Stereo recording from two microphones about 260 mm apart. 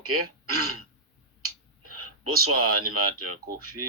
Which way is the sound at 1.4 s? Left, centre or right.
Right.